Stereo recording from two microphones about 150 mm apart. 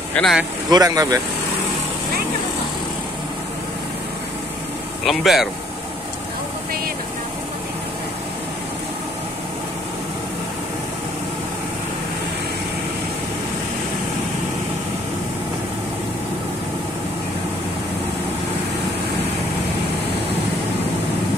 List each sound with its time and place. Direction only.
0.1 s speech: 5° left (ahead or behind)
0.7 s speech: 25° right (ahead or behind)
5.0 s speech: centre (ahead or behind)